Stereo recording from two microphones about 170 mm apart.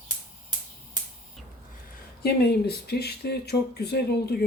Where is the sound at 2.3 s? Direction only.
70° left (ahead or behind).